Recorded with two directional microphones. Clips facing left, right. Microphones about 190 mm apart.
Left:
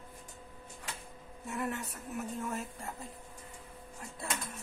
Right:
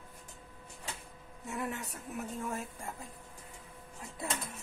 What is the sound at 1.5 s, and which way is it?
Speech, 15° right (ahead or behind).